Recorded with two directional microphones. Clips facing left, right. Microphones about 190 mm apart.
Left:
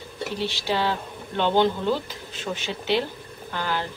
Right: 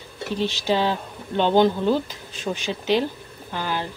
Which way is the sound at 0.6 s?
15° right (ahead or behind).